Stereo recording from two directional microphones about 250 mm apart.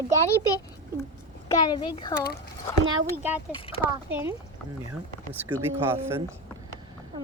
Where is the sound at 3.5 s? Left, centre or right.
Left.